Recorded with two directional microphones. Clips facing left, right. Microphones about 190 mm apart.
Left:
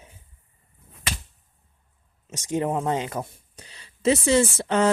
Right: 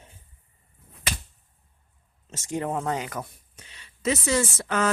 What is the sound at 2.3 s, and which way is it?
Speech, 20° left (ahead or behind).